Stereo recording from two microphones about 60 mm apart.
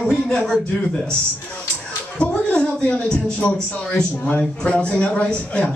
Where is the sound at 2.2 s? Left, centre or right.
Centre.